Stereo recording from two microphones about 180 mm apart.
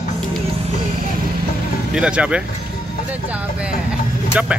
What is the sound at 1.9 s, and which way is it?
Speech, 5° right (ahead or behind).